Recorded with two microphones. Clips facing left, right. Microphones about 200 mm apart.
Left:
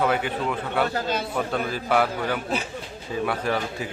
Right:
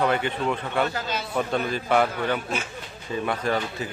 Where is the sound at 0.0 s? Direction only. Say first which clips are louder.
Even; 5° left (ahead or behind).